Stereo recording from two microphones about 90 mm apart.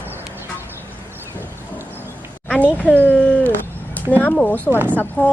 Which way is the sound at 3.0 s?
15° left (ahead or behind).